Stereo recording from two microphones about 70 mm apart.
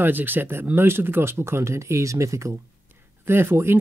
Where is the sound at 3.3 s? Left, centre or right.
Right.